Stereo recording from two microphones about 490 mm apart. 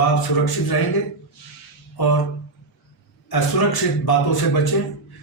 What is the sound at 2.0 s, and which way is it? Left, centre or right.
Speech, left.